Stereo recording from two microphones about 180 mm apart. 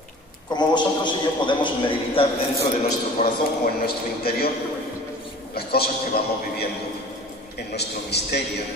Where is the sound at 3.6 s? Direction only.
60° left (ahead or behind).